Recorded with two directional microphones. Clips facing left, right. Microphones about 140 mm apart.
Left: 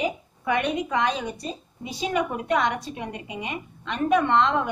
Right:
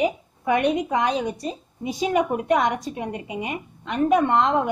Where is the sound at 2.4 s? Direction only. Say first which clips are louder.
Right 3 dB; 45° right (ahead or behind).